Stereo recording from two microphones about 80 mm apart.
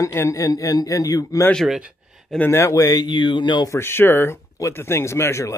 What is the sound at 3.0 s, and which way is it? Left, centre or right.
Speech, left.